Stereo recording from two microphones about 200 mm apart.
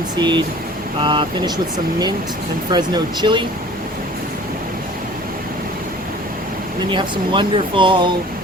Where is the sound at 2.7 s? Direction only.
20° right (ahead or behind).